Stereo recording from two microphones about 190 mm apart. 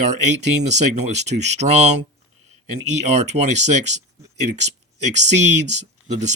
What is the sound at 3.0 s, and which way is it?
Speech, 35° right (ahead or behind).